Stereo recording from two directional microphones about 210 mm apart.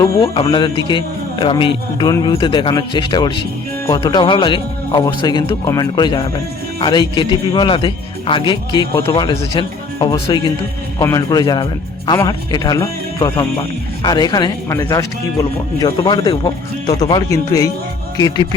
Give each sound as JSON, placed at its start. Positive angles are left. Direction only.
{"t": 0.2, "sound": "a man's voice", "side_deg": 25}